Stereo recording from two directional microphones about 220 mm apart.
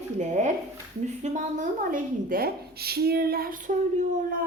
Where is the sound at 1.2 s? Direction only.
35° right (ahead or behind).